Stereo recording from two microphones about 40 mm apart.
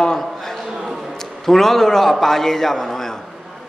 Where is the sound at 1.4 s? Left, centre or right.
Centre.